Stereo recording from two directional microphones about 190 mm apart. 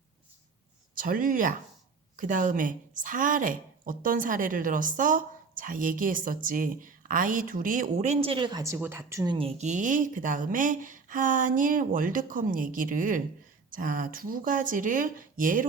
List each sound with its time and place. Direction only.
0.9 s a woman's voice: 50° right (ahead or behind)